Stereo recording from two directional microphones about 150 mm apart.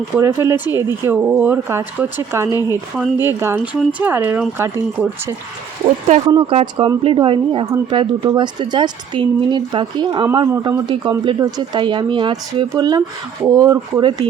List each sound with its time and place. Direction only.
0.2 s speech: 20° right (ahead or behind)
6.2 s a woman's voice: 35° right (ahead or behind)